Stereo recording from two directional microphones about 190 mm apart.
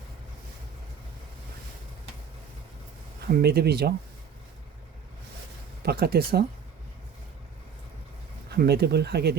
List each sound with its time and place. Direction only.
3.2 s speech: 55° right (ahead or behind)
5.8 s speech: 55° right (ahead or behind)
8.4 s speech: 60° right (ahead or behind)